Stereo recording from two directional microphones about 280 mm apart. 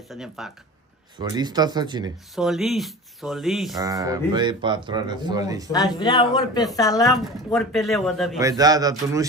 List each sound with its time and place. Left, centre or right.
0.1 s speech: centre
1.1 s speech: centre
2.3 s speech: centre
3.7 s speech: centre
5.7 s a woman's voice: centre
7.5 s speech: centre
8.4 s speech: centre